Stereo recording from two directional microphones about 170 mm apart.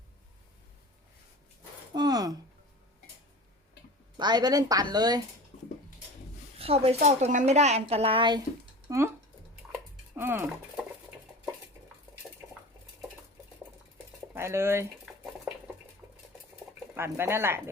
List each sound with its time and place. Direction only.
1.9 s a sound: 25° right (ahead or behind)
4.2 s speech: 25° right (ahead or behind)
6.6 s a woman's voice: 35° right (ahead or behind)
8.9 s speech: 15° right (ahead or behind)
10.2 s speech: 15° right (ahead or behind)
11.3 s dishes: 5° right (ahead or behind)
14.3 s speech: 15° right (ahead or behind)
15.0 s dishes: 5° right (ahead or behind)
16.9 s speech: 15° right (ahead or behind)